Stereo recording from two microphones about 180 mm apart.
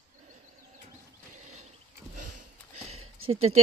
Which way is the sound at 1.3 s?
40° right (ahead or behind).